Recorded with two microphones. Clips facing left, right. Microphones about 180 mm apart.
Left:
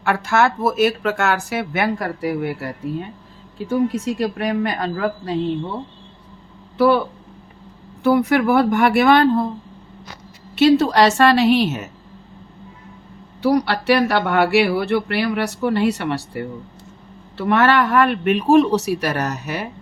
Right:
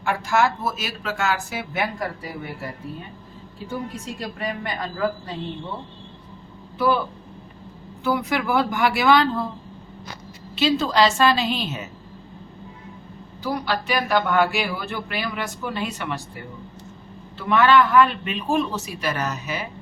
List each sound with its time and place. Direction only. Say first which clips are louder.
0.0 s speech: left 3 dB; 70° left (ahead or behind)
3.7 s speech: left 12 dB; 75° left (ahead or behind)
6.7 s speech: left 6 dB; 70° left (ahead or behind)
8.0 s speech: left 8 dB; 60° left (ahead or behind)
10.6 s speech: left 6 dB; 65° left (ahead or behind)
13.4 s speech: left 8 dB; 75° left (ahead or behind)